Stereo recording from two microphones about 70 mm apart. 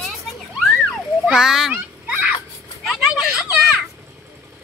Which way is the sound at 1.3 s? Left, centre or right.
Centre.